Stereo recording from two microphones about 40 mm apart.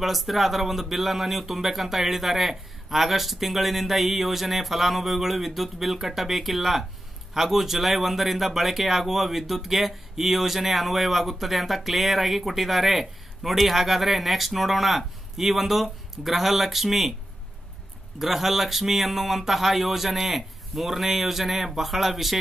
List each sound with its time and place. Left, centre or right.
0.0 s speech: centre
18.2 s speech: centre